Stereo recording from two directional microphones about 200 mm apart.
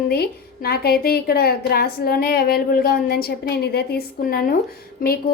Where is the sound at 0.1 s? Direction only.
50° left (ahead or behind).